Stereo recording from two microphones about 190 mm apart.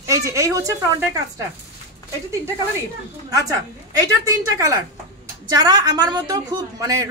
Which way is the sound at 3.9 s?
15° right (ahead or behind).